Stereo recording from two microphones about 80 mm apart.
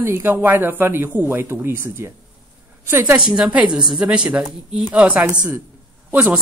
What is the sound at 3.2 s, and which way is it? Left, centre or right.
Speech, centre.